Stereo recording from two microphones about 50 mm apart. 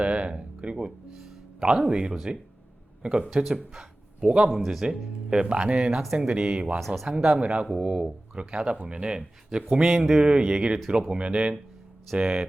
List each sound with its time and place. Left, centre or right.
0.0 s speech: right
6.7 s speech: centre
7.3 s speech: centre
12.2 s speech: centre